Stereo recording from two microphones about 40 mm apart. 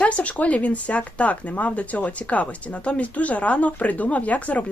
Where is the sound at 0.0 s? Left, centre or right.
Left.